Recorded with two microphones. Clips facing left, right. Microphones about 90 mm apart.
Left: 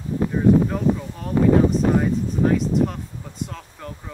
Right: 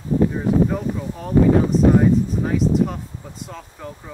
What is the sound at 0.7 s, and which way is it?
Speech, 5° right (ahead or behind).